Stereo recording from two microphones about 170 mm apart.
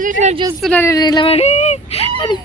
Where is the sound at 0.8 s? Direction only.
20° left (ahead or behind); by 2.1 s 40° left (ahead or behind).